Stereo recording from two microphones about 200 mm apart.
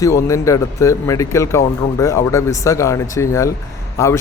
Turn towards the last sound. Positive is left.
turn(degrees=15)  # may be behind; listen again after turning